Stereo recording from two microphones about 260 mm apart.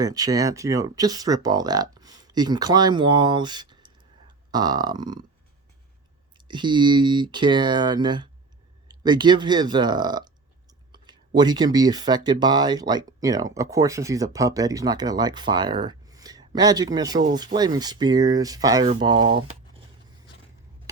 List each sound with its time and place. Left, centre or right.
0.0 s speech: centre
6.3 s speech: centre